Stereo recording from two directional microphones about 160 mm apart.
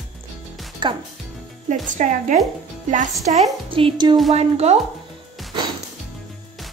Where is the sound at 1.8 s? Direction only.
55° right (ahead or behind).